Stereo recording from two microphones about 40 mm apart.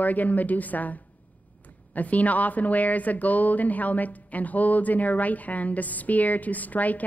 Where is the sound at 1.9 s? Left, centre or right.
Left.